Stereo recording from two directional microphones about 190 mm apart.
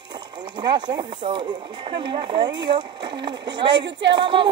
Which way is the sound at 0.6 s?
25° right (ahead or behind).